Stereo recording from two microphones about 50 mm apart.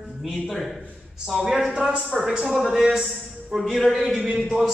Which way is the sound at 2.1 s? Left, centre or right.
Centre.